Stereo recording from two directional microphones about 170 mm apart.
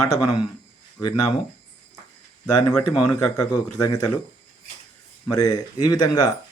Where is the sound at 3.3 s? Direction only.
20° left (ahead or behind).